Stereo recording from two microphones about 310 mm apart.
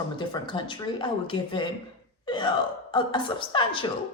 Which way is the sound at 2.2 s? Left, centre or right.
Centre.